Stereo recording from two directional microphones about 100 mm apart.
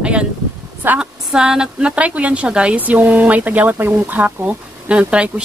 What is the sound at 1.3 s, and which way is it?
A woman's voice, 5° right (ahead or behind).